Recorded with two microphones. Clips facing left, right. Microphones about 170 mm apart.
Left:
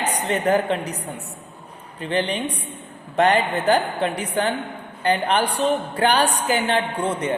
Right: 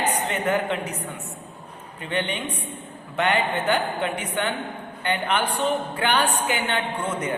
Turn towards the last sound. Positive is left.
turn(degrees=30)  # may be behind; listen again after turning